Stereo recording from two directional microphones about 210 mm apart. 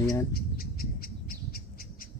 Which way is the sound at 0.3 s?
45° left (ahead or behind).